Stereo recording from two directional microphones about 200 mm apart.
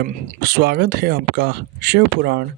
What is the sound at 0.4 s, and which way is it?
Speech, 50° right (ahead or behind).